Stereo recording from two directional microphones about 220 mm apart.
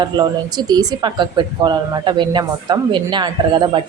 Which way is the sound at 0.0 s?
20° right (ahead or behind).